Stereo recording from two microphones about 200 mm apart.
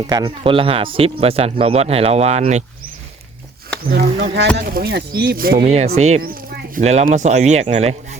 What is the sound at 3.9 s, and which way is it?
Speech, 50° right (ahead or behind).